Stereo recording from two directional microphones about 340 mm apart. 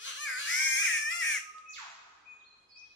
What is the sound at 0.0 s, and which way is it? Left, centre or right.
Baby cry, left.